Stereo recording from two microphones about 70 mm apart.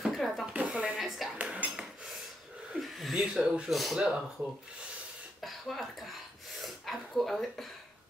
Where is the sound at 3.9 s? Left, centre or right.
Centre.